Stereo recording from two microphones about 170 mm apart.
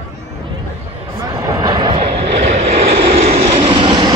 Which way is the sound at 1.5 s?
25° right (ahead or behind).